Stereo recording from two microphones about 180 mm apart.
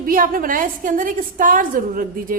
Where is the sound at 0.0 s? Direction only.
50° right (ahead or behind).